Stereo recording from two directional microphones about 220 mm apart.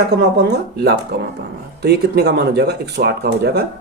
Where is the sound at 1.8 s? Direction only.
45° right (ahead or behind).